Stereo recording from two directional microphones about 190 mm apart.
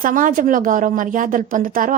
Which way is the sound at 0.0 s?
45° right (ahead or behind).